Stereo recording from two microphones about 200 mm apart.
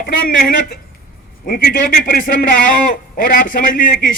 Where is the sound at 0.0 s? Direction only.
45° left (ahead or behind).